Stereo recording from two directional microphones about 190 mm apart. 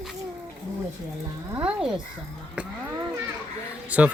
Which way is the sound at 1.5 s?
5° right (ahead or behind).